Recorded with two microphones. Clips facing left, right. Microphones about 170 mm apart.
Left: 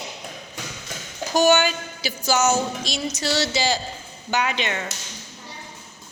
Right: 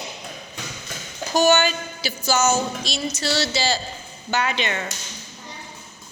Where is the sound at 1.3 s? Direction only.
15° left (ahead or behind).